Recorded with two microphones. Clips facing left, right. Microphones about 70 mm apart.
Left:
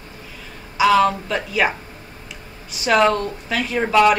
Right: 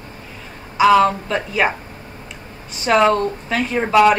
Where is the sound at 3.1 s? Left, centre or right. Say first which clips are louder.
Right 3 dB; right.